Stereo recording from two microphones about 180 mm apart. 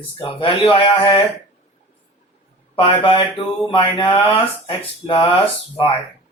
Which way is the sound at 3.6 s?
30° left (ahead or behind).